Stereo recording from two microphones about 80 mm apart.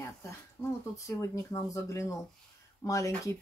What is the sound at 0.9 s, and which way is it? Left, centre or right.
Speech, left.